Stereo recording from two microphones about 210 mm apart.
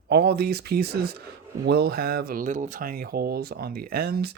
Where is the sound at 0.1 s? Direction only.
50° right (ahead or behind).